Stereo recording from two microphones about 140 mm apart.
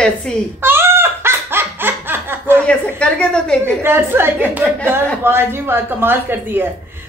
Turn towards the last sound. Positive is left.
turn(degrees=-15)  # may be behind; listen again after turning